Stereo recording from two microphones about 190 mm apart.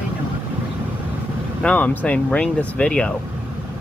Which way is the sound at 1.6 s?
5° left (ahead or behind).